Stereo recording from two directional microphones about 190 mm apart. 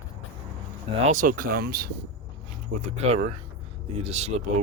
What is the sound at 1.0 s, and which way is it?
Speech, 40° right (ahead or behind).